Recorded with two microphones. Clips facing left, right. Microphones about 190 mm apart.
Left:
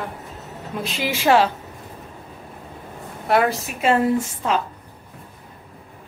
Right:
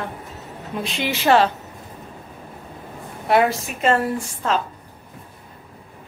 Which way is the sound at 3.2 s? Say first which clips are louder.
Right 1 dB; centre (ahead or behind).